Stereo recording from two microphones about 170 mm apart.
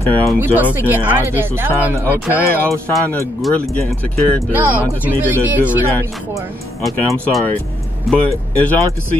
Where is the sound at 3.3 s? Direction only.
Centre (ahead or behind).